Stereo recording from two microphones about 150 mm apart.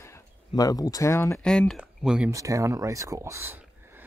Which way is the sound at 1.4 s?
5° left (ahead or behind).